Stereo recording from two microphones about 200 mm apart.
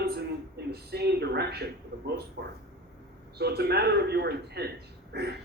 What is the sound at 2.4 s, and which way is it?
A man's voice, 60° right (ahead or behind).